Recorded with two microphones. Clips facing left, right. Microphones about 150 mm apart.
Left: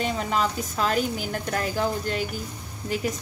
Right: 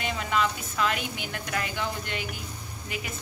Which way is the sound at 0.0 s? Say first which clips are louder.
Left 2 dB; 40° left (ahead or behind).